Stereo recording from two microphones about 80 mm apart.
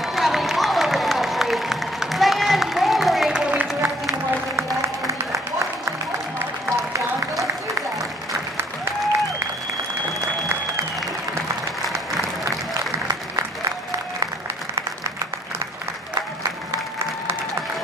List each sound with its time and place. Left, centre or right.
0.0 s applause: centre
3.3 s music: centre
4.6 s music: right